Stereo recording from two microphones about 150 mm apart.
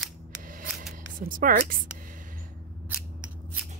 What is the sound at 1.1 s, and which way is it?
Speech, 65° right (ahead or behind).